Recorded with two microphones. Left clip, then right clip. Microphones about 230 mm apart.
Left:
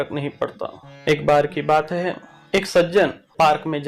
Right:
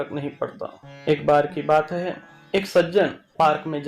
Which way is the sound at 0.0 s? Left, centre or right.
Centre.